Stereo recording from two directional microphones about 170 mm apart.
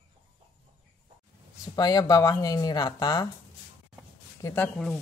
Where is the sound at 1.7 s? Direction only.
20° left (ahead or behind).